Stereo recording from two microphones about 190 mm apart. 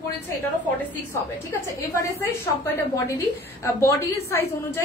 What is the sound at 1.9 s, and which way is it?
A woman's voice, 15° left (ahead or behind).